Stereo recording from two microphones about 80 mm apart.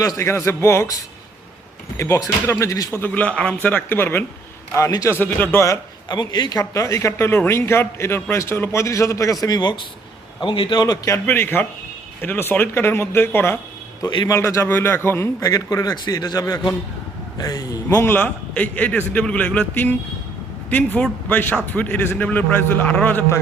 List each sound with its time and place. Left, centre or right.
0.0 s a man's voice: left
2.0 s a man's voice: left
3.0 s a man's voice: centre
6.1 s a man's voice: left
6.6 s a man's voice: left
9.6 s a man's voice: left
10.4 s a man's voice: left
11.3 s a man's voice: left
15.4 s a man's voice: left
17.8 s a man's voice: left